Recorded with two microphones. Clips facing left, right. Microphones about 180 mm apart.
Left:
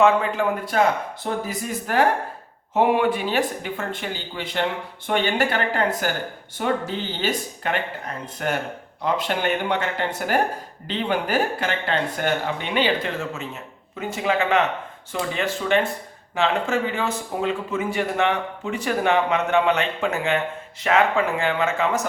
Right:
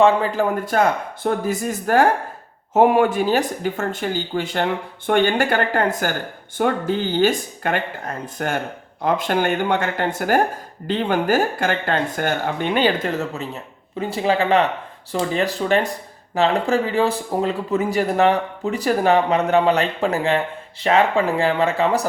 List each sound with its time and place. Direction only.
0.0 s speech: 35° right (ahead or behind)
0.7 s speech: 50° right (ahead or behind); by 22.0 s 35° right (ahead or behind)